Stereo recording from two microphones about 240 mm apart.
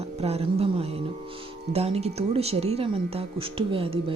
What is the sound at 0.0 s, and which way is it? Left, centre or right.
Speech, right.